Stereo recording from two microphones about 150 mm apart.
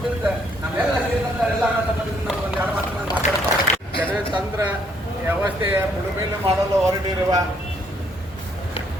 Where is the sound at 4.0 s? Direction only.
10° right (ahead or behind).